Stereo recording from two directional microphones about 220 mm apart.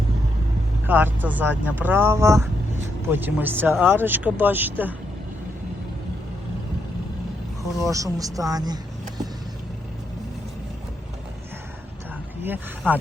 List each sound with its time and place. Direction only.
0.9 s speech: 10° right (ahead or behind)
7.8 s speech: 15° right (ahead or behind)
12.4 s speech: 10° right (ahead or behind)